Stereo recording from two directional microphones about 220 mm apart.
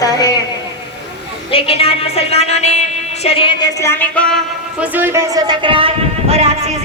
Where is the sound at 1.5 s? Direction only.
25° left (ahead or behind).